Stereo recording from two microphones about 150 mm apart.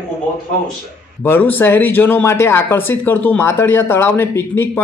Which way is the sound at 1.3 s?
15° left (ahead or behind).